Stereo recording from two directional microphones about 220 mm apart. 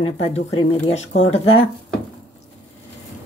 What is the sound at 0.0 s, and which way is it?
Speech, 25° left (ahead or behind).